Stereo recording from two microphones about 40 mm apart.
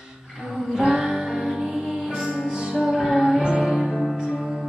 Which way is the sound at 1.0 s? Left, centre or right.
Centre.